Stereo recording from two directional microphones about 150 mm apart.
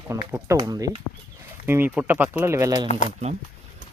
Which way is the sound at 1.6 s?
15° right (ahead or behind).